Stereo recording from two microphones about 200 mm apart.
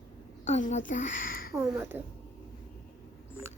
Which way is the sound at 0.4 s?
35° left (ahead or behind).